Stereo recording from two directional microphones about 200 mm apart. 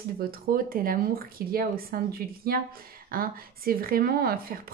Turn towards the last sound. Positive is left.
turn(degrees=-50)  # may be behind; listen again after turning